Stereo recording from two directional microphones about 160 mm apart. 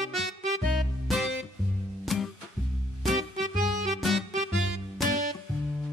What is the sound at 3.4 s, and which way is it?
Music, 55° right (ahead or behind).